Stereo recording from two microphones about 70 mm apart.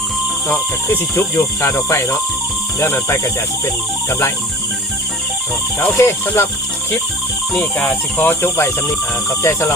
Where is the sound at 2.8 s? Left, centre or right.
Left.